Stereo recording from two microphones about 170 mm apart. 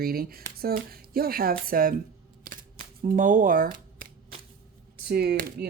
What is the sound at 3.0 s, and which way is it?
Speech, 50° right (ahead or behind).